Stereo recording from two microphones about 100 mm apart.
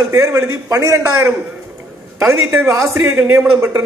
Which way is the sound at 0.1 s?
35° right (ahead or behind).